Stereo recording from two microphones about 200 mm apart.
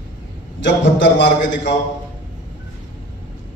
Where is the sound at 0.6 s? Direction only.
60° left (ahead or behind).